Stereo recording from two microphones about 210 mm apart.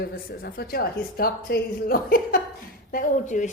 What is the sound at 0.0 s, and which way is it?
A woman's voice, 45° left (ahead or behind).